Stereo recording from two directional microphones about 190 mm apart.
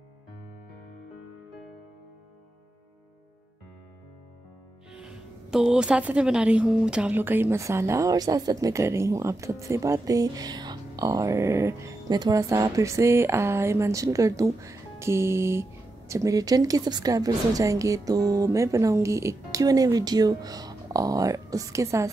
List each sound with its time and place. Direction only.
4.9 s a woman's voice: 5° right (ahead or behind)